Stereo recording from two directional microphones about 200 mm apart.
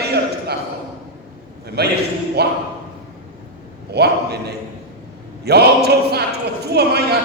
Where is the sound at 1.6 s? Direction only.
55° right (ahead or behind).